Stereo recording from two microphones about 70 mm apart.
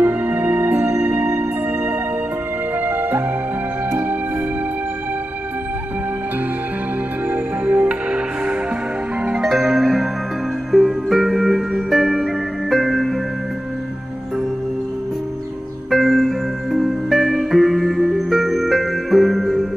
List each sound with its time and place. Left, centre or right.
0.0 s music: right
7.2 s music: right
9.5 s music: centre
15.9 s music: centre